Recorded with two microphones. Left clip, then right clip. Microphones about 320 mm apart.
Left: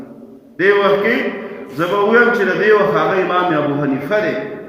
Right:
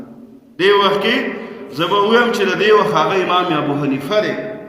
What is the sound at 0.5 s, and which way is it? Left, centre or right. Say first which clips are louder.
A man's voice: even; centre.